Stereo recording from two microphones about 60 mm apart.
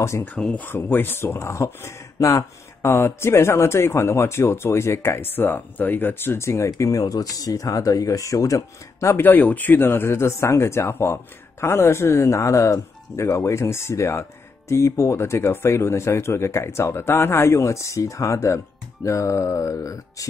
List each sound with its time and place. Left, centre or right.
0.4 s speech: centre
0.7 s speech: left
9.1 s speech: left
9.8 s speech: left
19.0 s mantra: left